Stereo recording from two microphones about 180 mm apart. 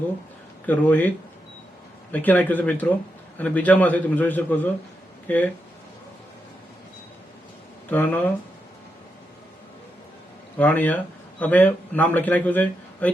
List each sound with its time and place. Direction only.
0.7 s a man's voice: 10° left (ahead or behind)
2.1 s a man's voice: 10° left (ahead or behind)
7.9 s a man's voice: 10° left (ahead or behind)
10.6 s a man's voice: 10° left (ahead or behind)